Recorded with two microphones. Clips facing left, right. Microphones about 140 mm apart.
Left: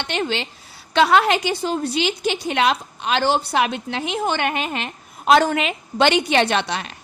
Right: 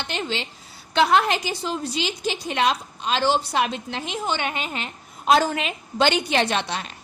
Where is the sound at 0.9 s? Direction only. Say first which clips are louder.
Left 3 dB; 80° left.